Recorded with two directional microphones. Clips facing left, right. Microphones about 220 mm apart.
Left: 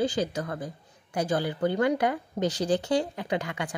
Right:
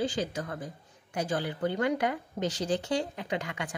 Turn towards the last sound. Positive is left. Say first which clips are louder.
# left 4 dB
turn(degrees=35)  # may be behind; listen again after turning